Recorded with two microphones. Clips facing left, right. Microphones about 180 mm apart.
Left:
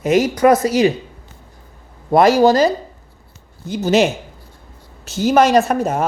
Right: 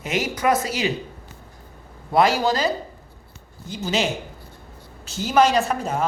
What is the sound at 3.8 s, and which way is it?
Speech, 50° left (ahead or behind).